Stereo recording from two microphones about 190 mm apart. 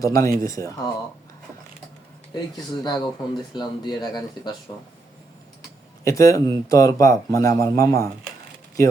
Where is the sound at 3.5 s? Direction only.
20° left (ahead or behind).